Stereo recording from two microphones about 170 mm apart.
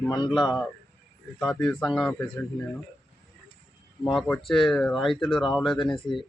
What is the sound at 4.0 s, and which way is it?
Speech, 5° left (ahead or behind).